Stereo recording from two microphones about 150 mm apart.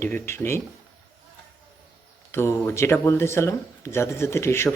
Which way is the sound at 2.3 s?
15° left (ahead or behind).